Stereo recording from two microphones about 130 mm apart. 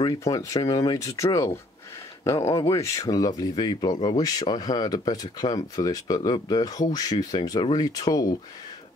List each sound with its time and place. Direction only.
0.2 s speech: 25° left (ahead or behind)
2.7 s speech: 25° left (ahead or behind)